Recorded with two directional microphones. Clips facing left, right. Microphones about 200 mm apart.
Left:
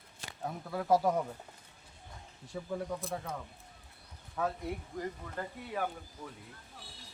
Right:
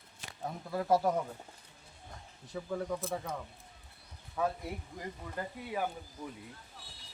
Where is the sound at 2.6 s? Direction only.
Centre (ahead or behind).